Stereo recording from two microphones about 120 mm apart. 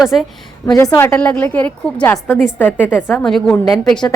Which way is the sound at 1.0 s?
15° left (ahead or behind).